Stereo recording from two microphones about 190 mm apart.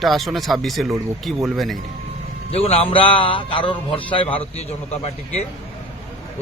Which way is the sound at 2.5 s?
30° left (ahead or behind).